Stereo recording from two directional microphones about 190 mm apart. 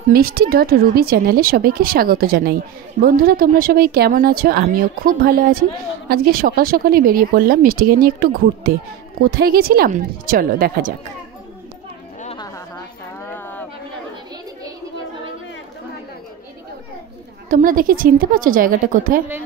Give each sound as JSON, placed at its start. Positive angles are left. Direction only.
{"t": 0.1, "sound": "speech", "side_deg": -55}
{"t": 13.3, "sound": "a sound", "side_deg": 10}
{"t": 17.5, "sound": "speech", "side_deg": -45}